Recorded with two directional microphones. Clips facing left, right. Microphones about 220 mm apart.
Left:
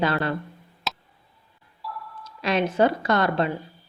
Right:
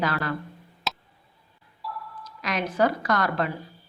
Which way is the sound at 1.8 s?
Centre (ahead or behind).